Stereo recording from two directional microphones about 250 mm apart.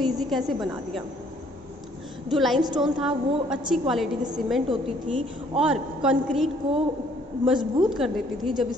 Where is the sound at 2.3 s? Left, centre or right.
Centre.